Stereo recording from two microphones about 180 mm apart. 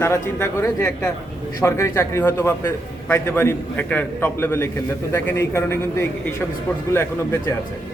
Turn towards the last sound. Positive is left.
turn(degrees=15)  # may be behind; listen again after turning